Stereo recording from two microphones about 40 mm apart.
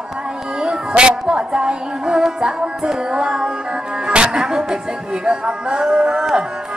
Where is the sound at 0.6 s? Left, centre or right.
Right.